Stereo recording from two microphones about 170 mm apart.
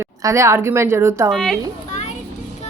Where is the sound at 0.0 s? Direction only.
20° right (ahead or behind).